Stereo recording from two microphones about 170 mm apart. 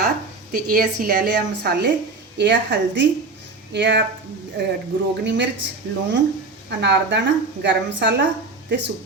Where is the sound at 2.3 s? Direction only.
90° right.